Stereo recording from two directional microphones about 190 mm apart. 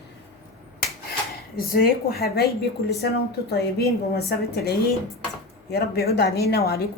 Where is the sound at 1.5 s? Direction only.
50° left (ahead or behind).